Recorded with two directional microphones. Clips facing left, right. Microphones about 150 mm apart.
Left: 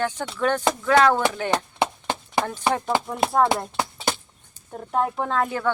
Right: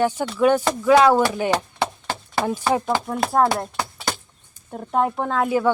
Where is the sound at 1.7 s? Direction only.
20° left (ahead or behind).